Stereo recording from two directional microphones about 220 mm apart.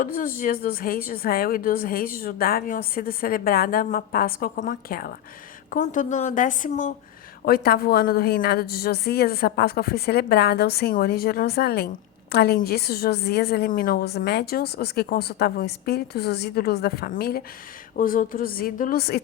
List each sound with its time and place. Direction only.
0.0 s a woman's voice: 40° left (ahead or behind)